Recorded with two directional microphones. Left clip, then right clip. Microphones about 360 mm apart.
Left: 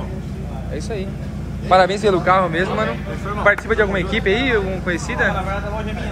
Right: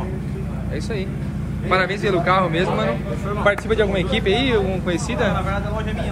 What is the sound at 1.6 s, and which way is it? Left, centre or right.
A man's voice, centre.